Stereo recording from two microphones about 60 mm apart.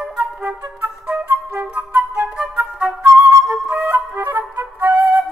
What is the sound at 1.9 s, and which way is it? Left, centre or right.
Flute, right.